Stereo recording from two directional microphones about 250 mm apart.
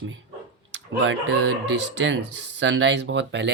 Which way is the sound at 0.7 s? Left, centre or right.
Right.